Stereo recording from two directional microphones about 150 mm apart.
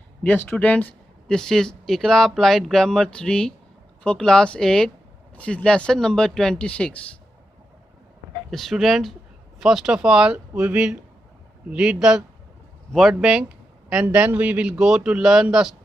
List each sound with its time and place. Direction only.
0.2 s speech: 10° left (ahead or behind)
8.4 s a man's voice: centre (ahead or behind)